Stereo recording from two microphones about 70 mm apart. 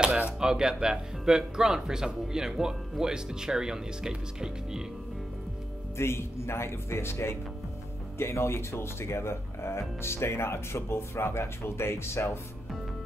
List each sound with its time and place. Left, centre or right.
0.0 s speech: centre
5.9 s speech: left